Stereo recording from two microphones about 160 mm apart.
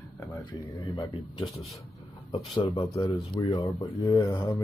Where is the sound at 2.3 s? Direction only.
30° left (ahead or behind).